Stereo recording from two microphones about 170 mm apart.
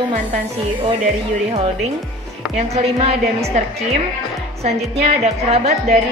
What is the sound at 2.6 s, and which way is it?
Speech, 35° right (ahead or behind).